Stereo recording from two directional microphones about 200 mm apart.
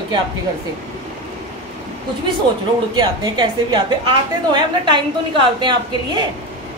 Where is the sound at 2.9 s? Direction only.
20° right (ahead or behind).